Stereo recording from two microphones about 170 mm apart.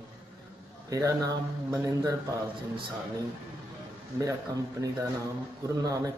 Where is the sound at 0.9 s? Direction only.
20° right (ahead or behind).